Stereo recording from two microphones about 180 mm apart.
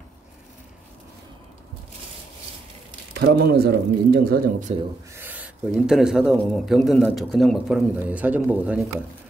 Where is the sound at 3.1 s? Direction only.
60° right (ahead or behind).